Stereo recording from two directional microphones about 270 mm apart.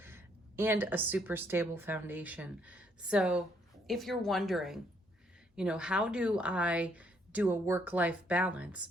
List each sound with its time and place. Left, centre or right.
0.0 s a woman's voice: centre